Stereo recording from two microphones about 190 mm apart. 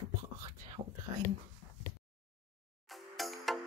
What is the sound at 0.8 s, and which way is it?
Speech, 30° right (ahead or behind).